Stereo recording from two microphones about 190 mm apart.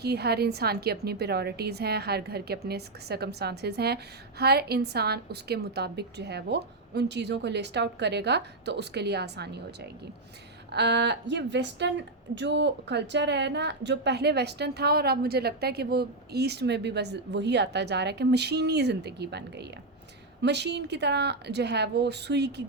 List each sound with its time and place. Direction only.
0.0 s a woman's voice: 60° right (ahead or behind)
10.7 s a woman's voice: 65° right (ahead or behind)